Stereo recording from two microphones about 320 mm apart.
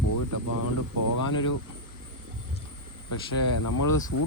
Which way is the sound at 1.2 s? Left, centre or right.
Left.